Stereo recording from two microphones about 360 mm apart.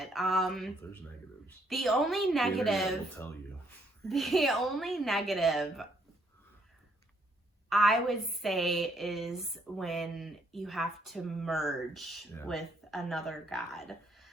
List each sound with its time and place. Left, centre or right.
0.0 s speech: centre
7.7 s speech: centre